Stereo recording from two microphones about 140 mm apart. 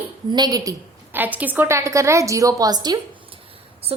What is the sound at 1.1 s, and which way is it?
A woman's voice, 10° right (ahead or behind).